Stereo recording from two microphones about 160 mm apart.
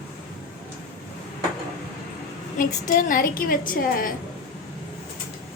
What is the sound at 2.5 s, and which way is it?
A woman's voice, 55° left (ahead or behind).